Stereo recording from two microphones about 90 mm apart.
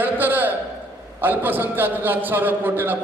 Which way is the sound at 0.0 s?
20° right (ahead or behind).